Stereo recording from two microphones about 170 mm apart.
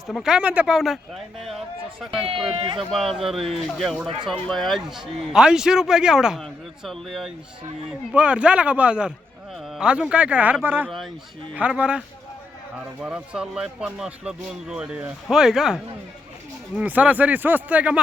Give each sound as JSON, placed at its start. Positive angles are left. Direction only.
{"t": 0.1, "sound": "a man's voice", "side_deg": -5}
{"t": 2.5, "sound": "speech", "side_deg": -30}
{"t": 3.2, "sound": "a man's voice", "side_deg": 0}
{"t": 10.8, "sound": "a man's voice", "side_deg": 0}